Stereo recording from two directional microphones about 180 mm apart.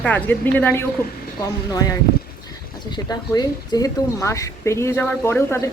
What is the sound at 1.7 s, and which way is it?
Speech, 20° left (ahead or behind).